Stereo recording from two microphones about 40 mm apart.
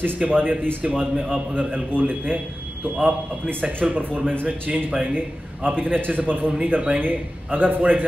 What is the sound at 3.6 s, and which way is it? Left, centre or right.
A man's voice, right.